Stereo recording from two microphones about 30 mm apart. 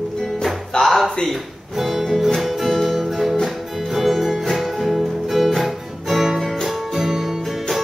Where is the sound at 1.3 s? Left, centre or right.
Centre.